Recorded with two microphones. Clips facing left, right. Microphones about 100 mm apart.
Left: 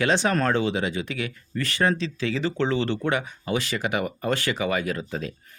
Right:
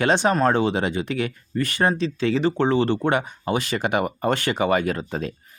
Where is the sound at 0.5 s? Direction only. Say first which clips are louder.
Right 3 dB; 55° right (ahead or behind).